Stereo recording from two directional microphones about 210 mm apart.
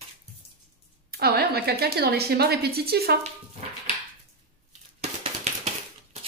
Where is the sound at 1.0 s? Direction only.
50° right (ahead or behind).